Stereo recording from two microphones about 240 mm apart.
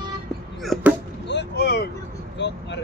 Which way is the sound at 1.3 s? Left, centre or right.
Left.